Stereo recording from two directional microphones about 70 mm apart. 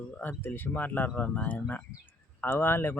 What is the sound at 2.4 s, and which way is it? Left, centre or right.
Speech, left.